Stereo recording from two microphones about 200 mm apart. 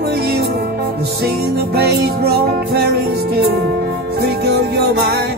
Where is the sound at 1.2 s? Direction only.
50° right (ahead or behind).